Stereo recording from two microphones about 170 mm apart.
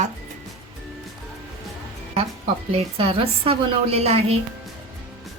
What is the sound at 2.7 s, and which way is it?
A woman's voice, 35° right (ahead or behind).